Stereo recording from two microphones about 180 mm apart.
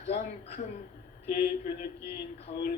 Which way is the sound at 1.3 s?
60° left (ahead or behind).